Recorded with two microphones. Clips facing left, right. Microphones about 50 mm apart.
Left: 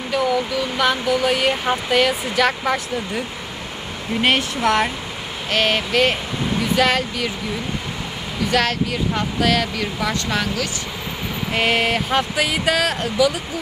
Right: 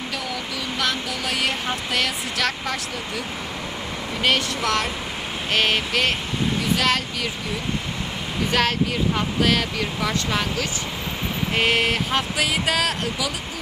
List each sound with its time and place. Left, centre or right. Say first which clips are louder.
0.8 s speech: left 8 dB; centre
4.2 s speech: left 3 dB; left
5.5 s speech: left 2 dB; centre
8.4 s speech: left 2 dB; centre